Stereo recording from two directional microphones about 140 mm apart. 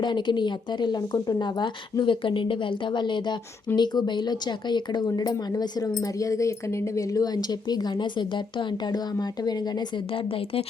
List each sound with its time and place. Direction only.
0.0 s a woman's voice: 30° left (ahead or behind)